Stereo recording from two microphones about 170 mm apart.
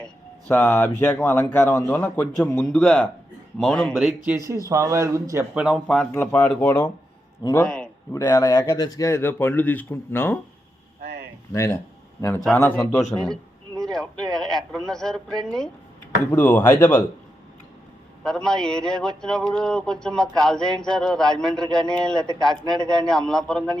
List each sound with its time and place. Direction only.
0.0 s a man's voice: 10° left (ahead or behind)
4.3 s a man's voice: 20° right (ahead or behind)
5.5 s speech: centre (ahead or behind)
8.1 s speech: 20° left (ahead or behind)
11.0 s a sound: 70° right (ahead or behind)
11.5 s speech: 15° left (ahead or behind)
13.9 s a sound: 5° left (ahead or behind)
14.3 s a man's voice: 5° left (ahead or behind)
18.2 s a man's voice: 5° left (ahead or behind)